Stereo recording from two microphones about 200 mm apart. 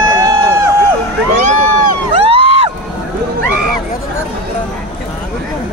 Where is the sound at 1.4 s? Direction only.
35° right (ahead or behind).